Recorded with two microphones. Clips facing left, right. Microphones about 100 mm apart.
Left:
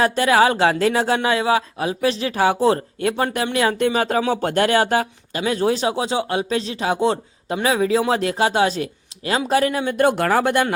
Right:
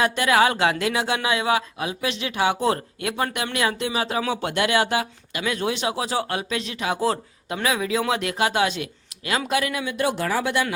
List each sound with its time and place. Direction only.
0.0 s speech: 35° left (ahead or behind)
3.7 s speech: 45° left (ahead or behind)